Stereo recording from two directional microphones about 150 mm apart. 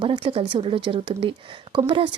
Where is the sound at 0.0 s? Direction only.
35° right (ahead or behind).